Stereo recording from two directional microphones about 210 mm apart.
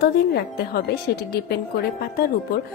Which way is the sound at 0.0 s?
50° left (ahead or behind).